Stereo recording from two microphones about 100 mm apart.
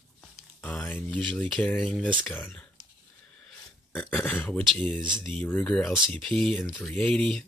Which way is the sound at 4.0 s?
15° left (ahead or behind).